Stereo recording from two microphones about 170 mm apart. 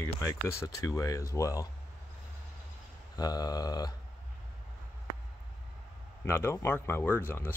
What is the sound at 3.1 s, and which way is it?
Speech, 20° left (ahead or behind).